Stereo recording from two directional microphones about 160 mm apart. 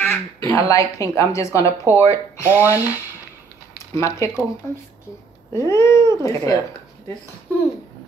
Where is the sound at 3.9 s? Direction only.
20° left (ahead or behind).